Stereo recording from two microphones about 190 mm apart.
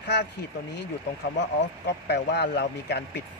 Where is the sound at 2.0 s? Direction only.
60° left (ahead or behind).